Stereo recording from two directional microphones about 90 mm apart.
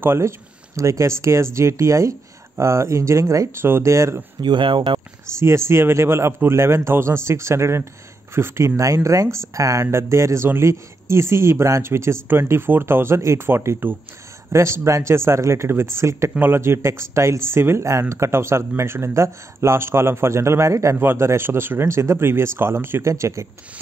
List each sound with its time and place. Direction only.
0.0 s speech: 25° right (ahead or behind)
4.4 s speech: 60° right (ahead or behind)
5.4 s speech: 30° right (ahead or behind)